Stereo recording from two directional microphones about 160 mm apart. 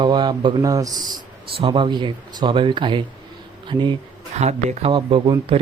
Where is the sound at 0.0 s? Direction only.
30° right (ahead or behind).